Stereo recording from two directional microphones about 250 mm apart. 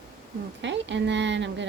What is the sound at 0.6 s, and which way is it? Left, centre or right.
A woman's voice, right.